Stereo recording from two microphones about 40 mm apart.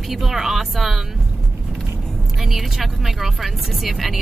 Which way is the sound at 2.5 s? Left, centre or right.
Centre.